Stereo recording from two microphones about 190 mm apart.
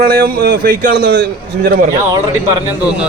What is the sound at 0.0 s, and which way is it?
A man's voice, 55° right (ahead or behind).